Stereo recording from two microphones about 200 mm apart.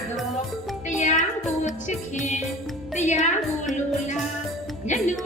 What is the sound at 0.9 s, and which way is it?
Music, 35° left (ahead or behind).